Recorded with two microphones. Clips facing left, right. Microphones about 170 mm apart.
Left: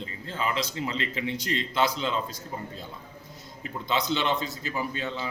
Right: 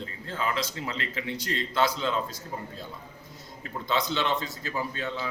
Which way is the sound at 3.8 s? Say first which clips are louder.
Left 1 dB; 20° left (ahead or behind).